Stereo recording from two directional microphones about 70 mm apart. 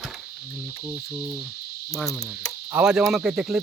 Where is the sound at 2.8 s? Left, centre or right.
Centre.